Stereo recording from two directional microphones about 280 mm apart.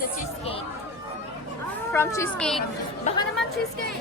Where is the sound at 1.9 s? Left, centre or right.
Centre.